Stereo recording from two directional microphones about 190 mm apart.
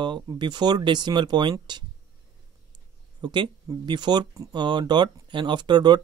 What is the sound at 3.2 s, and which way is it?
Speech, 25° right (ahead or behind).